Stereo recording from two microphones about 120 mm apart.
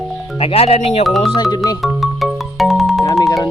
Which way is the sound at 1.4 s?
35° left (ahead or behind).